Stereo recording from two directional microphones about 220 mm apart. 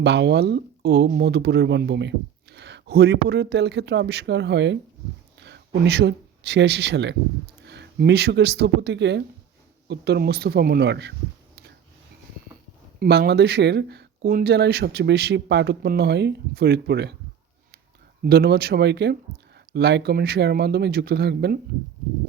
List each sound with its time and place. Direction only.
0.0 s speech: 50° right (ahead or behind)
13.0 s speech: 45° right (ahead or behind)
18.2 s speech: 45° right (ahead or behind)